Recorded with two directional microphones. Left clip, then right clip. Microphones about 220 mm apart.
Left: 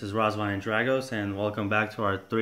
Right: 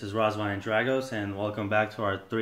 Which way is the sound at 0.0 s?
40° left (ahead or behind).